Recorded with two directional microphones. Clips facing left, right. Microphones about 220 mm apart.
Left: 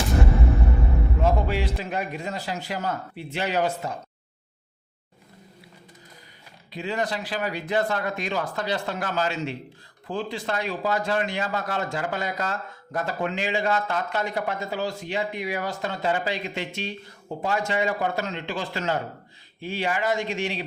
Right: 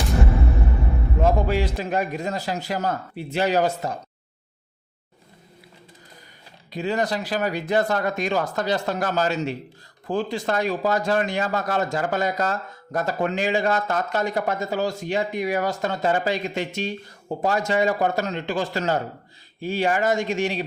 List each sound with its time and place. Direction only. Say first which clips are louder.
1.2 s speech: right 4 dB; 45° right (ahead or behind)
6.7 s speech: right 4 dB; 40° right (ahead or behind)